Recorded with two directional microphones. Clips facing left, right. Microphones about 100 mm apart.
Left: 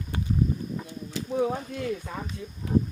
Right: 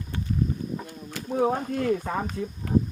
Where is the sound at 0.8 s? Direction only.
50° right (ahead or behind).